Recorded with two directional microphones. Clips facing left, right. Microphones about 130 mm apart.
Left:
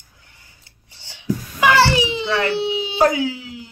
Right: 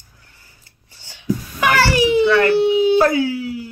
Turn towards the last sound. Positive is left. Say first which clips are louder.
# right 4 dB
turn(degrees=20)  # may be behind; listen again after turning